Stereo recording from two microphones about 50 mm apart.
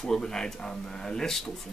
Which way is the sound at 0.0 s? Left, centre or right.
Centre.